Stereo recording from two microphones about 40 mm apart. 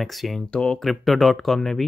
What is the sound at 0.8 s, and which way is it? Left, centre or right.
Speech, centre.